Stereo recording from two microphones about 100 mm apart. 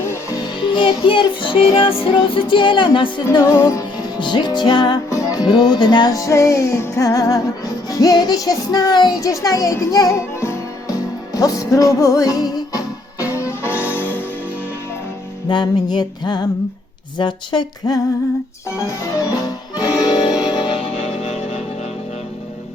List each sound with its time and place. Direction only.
0.0 s music: 25° left (ahead or behind)
0.7 s music: 55° left (ahead or behind)
3.3 s music: 35° left (ahead or behind)
4.2 s music: 50° left (ahead or behind)
5.0 s music: 35° left (ahead or behind)
13.3 s music: 25° left (ahead or behind)
15.4 s music: 45° left (ahead or behind); by 21.6 s 80° left